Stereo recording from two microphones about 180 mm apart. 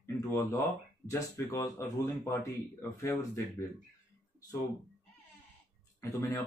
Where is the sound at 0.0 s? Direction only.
15° left (ahead or behind).